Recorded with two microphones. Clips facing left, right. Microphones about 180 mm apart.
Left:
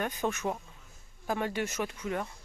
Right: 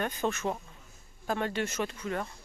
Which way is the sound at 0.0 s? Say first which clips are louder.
Right 1 dB; 10° left (ahead or behind).